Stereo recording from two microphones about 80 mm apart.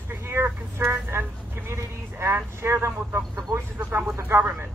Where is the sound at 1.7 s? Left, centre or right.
Right.